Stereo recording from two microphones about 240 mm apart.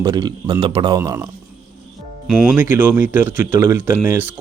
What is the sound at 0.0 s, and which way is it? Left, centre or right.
Speech, centre.